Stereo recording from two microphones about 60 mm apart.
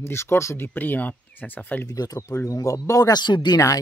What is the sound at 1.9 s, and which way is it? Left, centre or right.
Speech, left.